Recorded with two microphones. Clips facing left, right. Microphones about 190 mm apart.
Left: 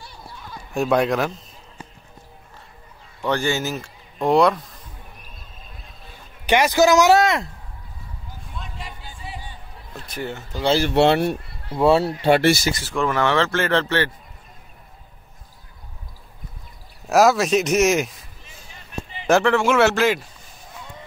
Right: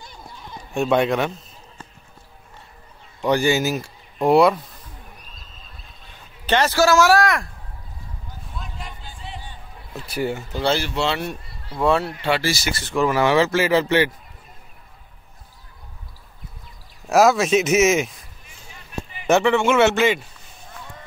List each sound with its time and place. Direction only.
0.0 s a sound: 20° right (ahead or behind)
0.7 s speech: centre (ahead or behind)
3.2 s speech: 10° right (ahead or behind)
6.4 s speech: 15° left (ahead or behind)
8.5 s music: centre (ahead or behind)
9.9 s speech: 10° right (ahead or behind)
10.9 s speech: 60° left (ahead or behind)
11.7 s speech: 30° left (ahead or behind)
12.3 s speech: 55° left (ahead or behind)
12.8 s speech: 5° right (ahead or behind)
17.1 s speech: centre (ahead or behind)
19.2 s speech: centre (ahead or behind)